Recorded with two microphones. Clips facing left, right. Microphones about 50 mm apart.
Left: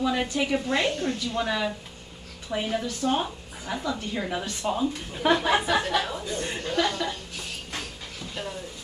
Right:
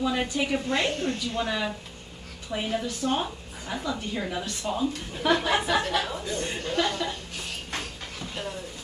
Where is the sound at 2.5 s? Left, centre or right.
Centre.